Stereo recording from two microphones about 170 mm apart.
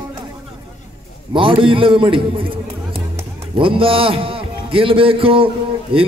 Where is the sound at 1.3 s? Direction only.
30° right (ahead or behind).